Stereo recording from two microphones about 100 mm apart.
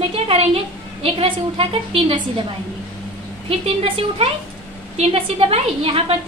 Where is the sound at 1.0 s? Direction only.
65° right (ahead or behind).